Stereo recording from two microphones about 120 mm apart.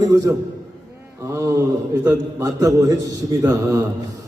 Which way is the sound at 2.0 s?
30° right (ahead or behind).